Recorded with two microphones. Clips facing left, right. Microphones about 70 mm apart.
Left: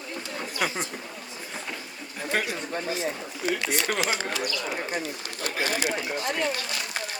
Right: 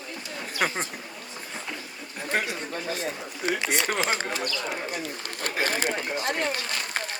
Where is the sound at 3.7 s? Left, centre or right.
Right.